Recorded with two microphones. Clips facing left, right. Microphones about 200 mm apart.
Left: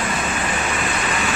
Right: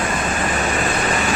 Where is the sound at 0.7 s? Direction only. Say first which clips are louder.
Right 3 dB; 40° right (ahead or behind).